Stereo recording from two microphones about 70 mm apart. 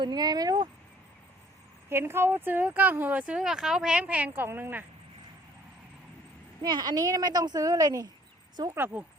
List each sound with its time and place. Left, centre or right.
0.0 s speech: right
1.9 s speech: right; by 4.3 s centre
4.4 s a woman's voice: right
6.6 s speech: right
8.7 s speech: right